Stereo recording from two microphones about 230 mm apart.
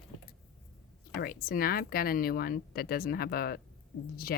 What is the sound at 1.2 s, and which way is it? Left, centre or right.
Speech, left.